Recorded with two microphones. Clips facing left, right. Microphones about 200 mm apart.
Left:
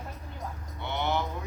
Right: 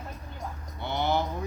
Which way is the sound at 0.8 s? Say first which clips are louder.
Right 3 dB; 35° right (ahead or behind).